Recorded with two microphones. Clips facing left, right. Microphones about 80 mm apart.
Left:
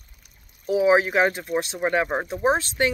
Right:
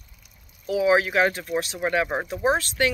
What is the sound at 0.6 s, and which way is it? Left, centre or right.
Speech, left.